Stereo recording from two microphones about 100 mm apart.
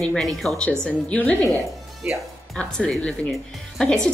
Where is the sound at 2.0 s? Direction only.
10° right (ahead or behind).